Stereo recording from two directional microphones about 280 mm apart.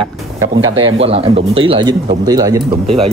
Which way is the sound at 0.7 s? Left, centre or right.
Centre.